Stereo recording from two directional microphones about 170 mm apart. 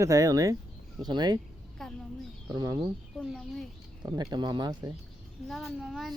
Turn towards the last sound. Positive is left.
turn(degrees=0)  # may be behind; listen again after turning